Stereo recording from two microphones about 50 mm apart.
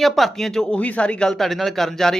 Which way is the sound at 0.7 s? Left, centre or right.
Left.